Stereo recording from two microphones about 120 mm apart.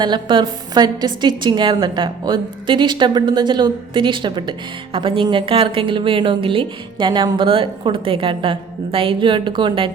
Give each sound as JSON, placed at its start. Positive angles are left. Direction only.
{"t": 0.0, "sound": "a woman's voice", "side_deg": -40}